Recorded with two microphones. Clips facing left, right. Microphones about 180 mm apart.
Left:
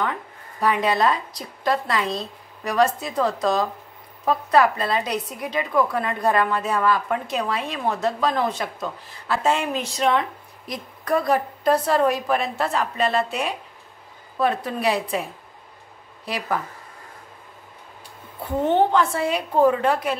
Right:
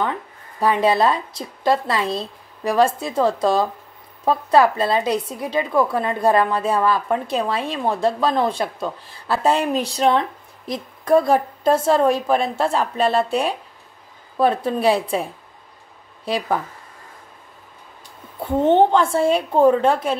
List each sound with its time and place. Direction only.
0.0 s a woman's voice: 30° right (ahead or behind)
16.3 s a woman's voice: 25° right (ahead or behind)
18.4 s a woman's voice: 25° right (ahead or behind)